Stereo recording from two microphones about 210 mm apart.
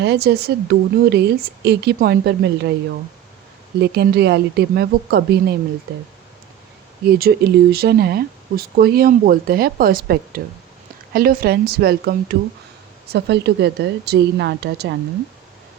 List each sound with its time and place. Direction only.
0.0 s speech: 55° right (ahead or behind)
3.8 s speech: 50° right (ahead or behind)
7.2 s speech: 45° right (ahead or behind)